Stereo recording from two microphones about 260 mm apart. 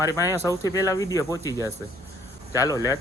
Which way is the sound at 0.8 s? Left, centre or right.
Centre.